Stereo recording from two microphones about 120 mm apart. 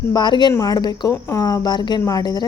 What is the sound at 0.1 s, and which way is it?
A woman's voice, 40° left (ahead or behind).